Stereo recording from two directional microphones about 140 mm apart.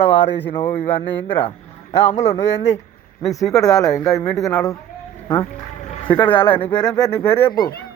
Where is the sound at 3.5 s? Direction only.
25° left (ahead or behind).